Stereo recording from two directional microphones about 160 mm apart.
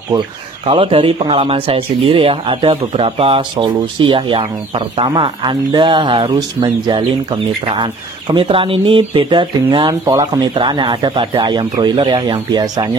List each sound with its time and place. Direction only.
0.7 s speech: 35° right (ahead or behind)